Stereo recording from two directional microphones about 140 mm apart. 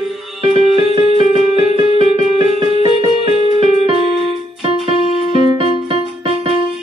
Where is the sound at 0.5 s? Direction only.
40° right (ahead or behind).